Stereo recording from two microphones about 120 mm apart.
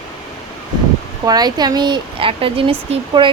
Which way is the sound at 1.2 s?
35° right (ahead or behind).